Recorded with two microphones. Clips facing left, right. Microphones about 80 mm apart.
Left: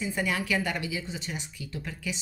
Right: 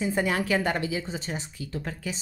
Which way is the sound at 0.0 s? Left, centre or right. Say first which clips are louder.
Right 4 dB; right.